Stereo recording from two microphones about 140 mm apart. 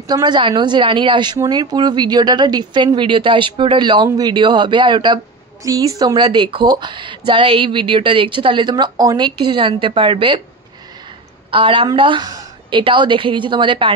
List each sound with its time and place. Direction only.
0.1 s speech: 30° right (ahead or behind)
11.5 s speech: 40° right (ahead or behind)